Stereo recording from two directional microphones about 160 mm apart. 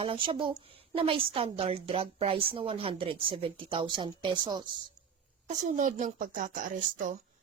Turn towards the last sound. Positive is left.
turn(degrees=-55)  # may be behind; listen again after turning